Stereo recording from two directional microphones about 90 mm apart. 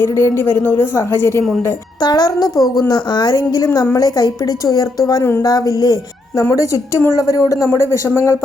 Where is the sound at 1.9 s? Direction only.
50° left (ahead or behind).